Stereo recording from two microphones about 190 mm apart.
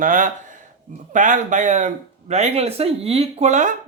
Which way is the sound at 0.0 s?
45° right (ahead or behind).